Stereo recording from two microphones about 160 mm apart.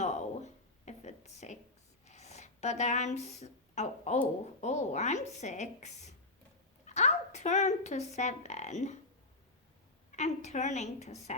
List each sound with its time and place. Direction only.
0.0 s a sound: 45° left (ahead or behind)
2.0 s a woman's voice: 45° left (ahead or behind)
10.1 s speech: 45° left (ahead or behind)